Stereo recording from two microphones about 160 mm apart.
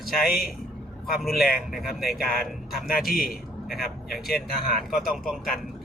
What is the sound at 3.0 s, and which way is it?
Speech, centre (ahead or behind).